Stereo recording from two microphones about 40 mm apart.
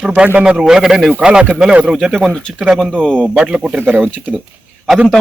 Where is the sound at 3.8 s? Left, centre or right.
Right.